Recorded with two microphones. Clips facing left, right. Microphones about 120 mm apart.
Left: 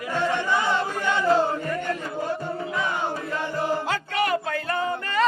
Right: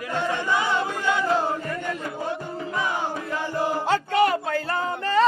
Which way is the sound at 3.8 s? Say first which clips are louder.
Right 5 dB; 30° right (ahead or behind).